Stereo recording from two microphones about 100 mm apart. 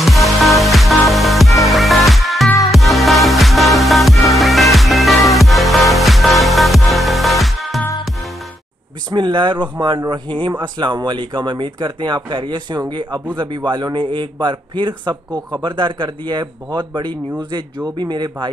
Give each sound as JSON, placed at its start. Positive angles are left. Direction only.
{"t": 0.0, "sound": "music", "side_deg": 0}
{"t": 9.1, "sound": "speech", "side_deg": -55}